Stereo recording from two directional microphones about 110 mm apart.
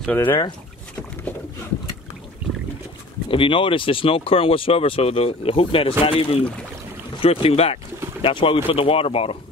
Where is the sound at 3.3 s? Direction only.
50° left (ahead or behind).